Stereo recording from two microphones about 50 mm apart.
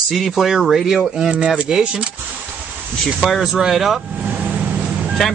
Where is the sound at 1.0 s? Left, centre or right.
Centre.